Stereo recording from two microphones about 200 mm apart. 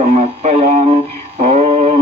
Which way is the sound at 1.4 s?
30° right (ahead or behind).